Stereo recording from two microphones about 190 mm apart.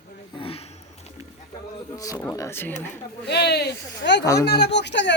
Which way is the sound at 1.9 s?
20° left (ahead or behind).